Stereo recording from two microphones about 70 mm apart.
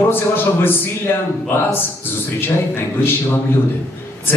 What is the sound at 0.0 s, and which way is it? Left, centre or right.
Speech, left.